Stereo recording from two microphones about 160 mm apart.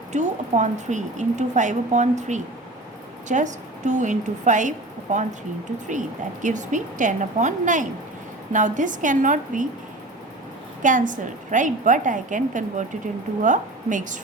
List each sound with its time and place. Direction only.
0.1 s a woman's voice: 45° right (ahead or behind)
6.4 s a woman's voice: 50° right (ahead or behind)
10.8 s a woman's voice: 55° right (ahead or behind)